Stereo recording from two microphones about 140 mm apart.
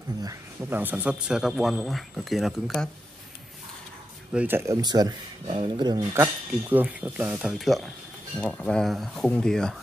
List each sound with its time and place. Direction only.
0.2 s a man's voice: 20° right (ahead or behind); by 2.9 s centre (ahead or behind)
4.3 s speech: 10° right (ahead or behind)
4.8 s speech: 30° right (ahead or behind)
6.1 s a man's voice: 15° right (ahead or behind); by 9.8 s 5° left (ahead or behind)